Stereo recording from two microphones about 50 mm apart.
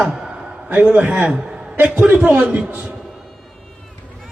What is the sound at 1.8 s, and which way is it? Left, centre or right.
Speech, right.